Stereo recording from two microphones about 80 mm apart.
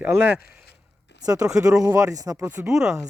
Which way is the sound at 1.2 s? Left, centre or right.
Right.